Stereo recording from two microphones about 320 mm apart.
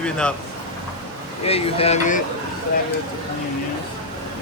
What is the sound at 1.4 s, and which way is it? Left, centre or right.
Speech, centre.